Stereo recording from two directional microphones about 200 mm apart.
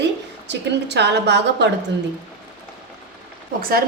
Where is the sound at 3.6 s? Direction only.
45° right (ahead or behind).